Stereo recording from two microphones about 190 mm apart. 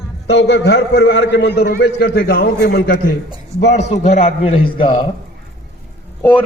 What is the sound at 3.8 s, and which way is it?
A man's voice, 35° left (ahead or behind).